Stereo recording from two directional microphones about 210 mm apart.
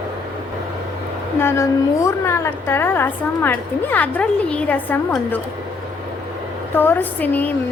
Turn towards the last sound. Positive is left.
turn(degrees=10)  # may be behind; listen again after turning